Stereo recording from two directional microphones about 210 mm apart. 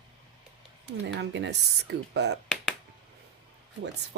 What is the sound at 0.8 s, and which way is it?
Speech, 55° right (ahead or behind).